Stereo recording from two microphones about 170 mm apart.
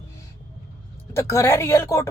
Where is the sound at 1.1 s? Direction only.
15° left (ahead or behind).